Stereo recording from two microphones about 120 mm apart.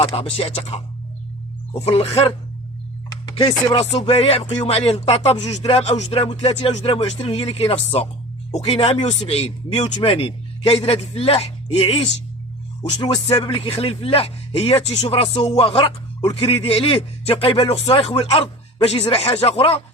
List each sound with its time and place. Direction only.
0.0 s speech: 55° left (ahead or behind)
1.8 s speech: 55° left (ahead or behind)
3.2 s chopping: 40° left (ahead or behind)
3.8 s speech: 65° left (ahead or behind)
8.5 s speech: 60° left (ahead or behind)
13.3 s speech: 50° left (ahead or behind)